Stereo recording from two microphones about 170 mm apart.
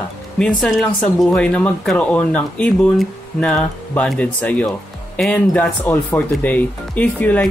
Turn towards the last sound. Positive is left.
turn(degrees=10)  # may be behind; listen again after turning